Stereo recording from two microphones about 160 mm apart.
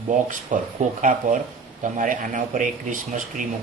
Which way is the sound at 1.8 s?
55° right (ahead or behind).